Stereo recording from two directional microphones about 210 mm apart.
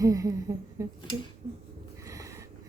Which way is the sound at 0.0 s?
15° right (ahead or behind).